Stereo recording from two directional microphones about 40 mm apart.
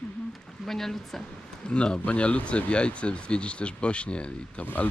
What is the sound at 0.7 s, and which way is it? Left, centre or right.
Speech, centre.